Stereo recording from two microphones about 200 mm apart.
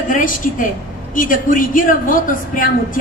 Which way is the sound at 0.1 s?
40° left (ahead or behind).